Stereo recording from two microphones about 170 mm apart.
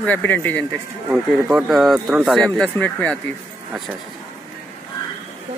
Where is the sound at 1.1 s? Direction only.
5° right (ahead or behind); by 3.1 s 10° left (ahead or behind).